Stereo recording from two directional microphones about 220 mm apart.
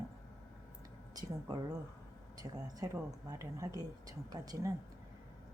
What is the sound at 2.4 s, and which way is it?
Speech, 15° right (ahead or behind).